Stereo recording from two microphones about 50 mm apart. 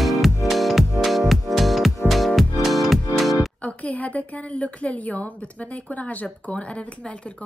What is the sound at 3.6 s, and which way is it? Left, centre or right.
A woman's voice, left.